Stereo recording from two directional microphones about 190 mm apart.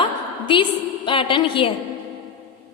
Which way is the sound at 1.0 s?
25° left (ahead or behind).